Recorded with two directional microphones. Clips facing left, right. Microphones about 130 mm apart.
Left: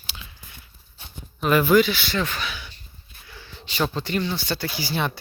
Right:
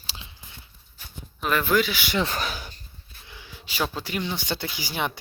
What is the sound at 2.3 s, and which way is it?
Speech, 40° right (ahead or behind).